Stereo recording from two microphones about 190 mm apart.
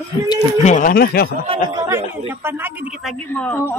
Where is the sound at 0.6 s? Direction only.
45° left (ahead or behind).